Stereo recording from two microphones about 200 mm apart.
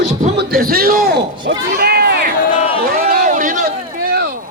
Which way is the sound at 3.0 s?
40° right (ahead or behind).